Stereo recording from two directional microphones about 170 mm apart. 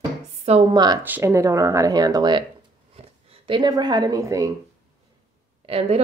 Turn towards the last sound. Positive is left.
turn(degrees=-35)  # may be behind; listen again after turning